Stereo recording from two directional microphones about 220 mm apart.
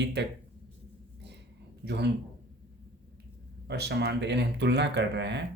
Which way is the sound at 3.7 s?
50° right (ahead or behind).